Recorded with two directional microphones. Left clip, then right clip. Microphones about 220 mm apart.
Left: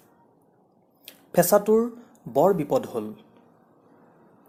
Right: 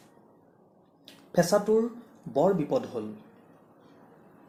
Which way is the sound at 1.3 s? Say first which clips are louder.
Left 5 dB; 20° left (ahead or behind).